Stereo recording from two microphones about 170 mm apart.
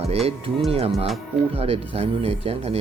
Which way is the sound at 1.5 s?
35° right (ahead or behind).